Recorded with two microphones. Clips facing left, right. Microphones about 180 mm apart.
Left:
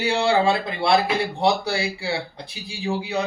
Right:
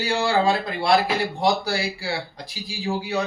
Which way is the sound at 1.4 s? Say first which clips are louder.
Left 1 dB; 25° left (ahead or behind).